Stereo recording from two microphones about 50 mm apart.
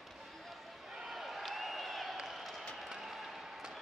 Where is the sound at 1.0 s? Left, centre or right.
Centre.